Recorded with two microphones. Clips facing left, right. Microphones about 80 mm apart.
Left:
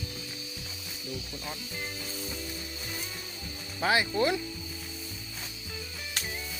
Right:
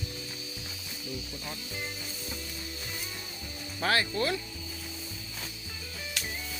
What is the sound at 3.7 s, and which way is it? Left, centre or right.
Speech, centre.